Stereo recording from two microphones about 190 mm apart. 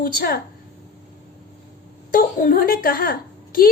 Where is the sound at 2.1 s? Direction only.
45° left (ahead or behind).